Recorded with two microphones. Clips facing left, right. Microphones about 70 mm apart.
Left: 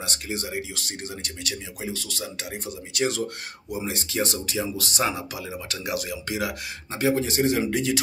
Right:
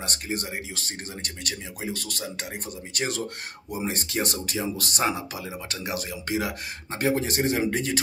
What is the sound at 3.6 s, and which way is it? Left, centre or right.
Speech, right.